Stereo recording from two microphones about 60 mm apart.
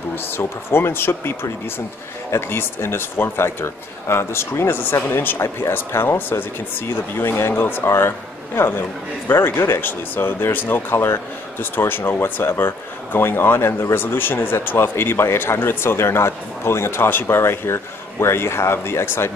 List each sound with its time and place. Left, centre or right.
0.4 s a man's voice: left
5.4 s speech: left
5.8 s a man's voice: left
13.9 s a man's voice: left